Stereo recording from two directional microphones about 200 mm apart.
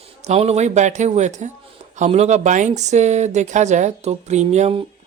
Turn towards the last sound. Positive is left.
turn(degrees=-35)  # may be behind; listen again after turning